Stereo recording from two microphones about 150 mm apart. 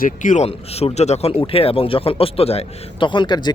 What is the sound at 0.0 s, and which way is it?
Speech, 60° left (ahead or behind).